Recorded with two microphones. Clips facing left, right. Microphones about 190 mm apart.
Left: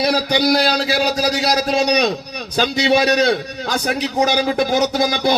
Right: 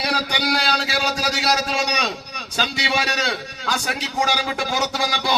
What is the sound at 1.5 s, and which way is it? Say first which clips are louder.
A man's voice: left 5 dB; 40° left (ahead or behind).